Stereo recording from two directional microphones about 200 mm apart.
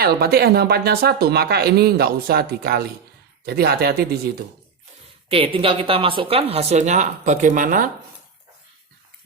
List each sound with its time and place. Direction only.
0.0 s speech: 50° right (ahead or behind)
5.3 s speech: 25° right (ahead or behind)